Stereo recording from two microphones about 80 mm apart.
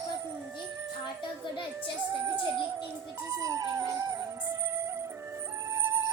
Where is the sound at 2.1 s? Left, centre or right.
Right.